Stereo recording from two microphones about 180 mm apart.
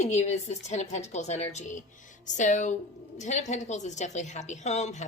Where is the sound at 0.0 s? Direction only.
40° left (ahead or behind).